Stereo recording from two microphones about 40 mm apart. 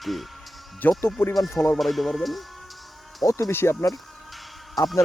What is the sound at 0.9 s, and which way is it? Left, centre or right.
Speech, centre.